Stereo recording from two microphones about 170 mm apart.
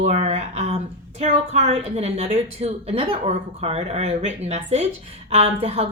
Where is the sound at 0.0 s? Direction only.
40° right (ahead or behind).